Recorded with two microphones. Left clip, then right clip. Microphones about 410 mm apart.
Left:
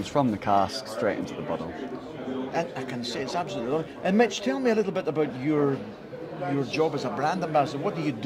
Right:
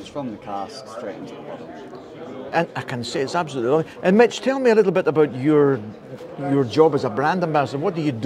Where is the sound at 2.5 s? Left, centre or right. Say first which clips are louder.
Right 10 dB; right.